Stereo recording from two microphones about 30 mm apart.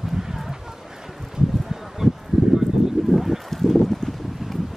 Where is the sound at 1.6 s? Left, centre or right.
Centre.